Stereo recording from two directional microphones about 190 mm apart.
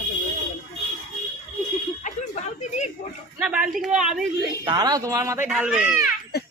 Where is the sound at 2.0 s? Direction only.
35° left (ahead or behind).